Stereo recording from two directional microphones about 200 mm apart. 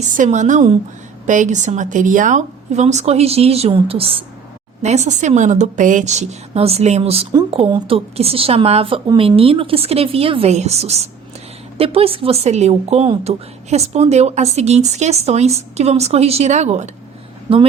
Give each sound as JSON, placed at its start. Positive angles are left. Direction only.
{"t": 0.2, "sound": "a woman's voice", "side_deg": -40}